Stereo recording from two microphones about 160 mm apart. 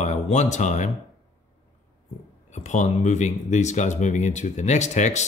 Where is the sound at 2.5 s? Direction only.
45° left (ahead or behind).